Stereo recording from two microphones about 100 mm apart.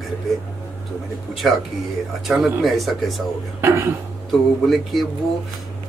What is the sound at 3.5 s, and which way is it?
Speech, 25° right (ahead or behind).